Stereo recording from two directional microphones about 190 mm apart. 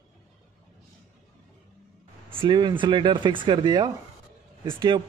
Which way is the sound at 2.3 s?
25° right (ahead or behind).